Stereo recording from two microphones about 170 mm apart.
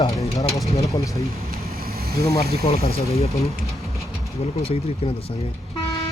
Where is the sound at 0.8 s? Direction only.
20° left (ahead or behind).